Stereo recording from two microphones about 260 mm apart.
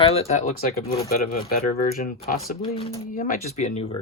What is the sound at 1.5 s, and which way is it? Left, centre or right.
Speech, left.